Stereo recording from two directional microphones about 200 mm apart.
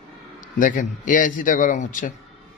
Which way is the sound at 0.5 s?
40° left (ahead or behind).